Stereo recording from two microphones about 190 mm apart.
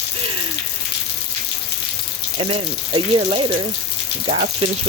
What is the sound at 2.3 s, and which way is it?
Speech, 30° right (ahead or behind).